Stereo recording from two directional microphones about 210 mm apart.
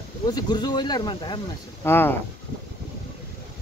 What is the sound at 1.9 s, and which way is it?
Speech, 10° left (ahead or behind).